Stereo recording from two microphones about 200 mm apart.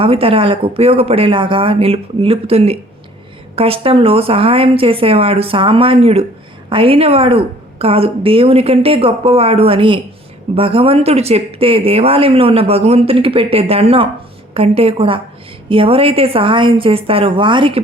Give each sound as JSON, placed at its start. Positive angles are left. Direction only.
{"t": 0.0, "sound": "speech", "side_deg": -30}